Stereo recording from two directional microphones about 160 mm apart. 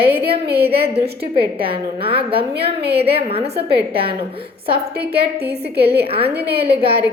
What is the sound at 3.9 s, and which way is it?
Speech, 35° right (ahead or behind).